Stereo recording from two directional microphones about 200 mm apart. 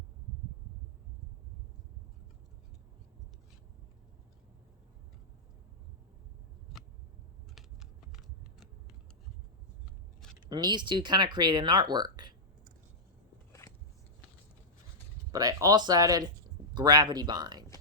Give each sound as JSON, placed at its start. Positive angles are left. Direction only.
{"t": 7.5, "sound": "typing", "side_deg": 0}
{"t": 10.5, "sound": "speech", "side_deg": -20}
{"t": 13.5, "sound": "a sound", "side_deg": 15}
{"t": 15.3, "sound": "speech", "side_deg": -15}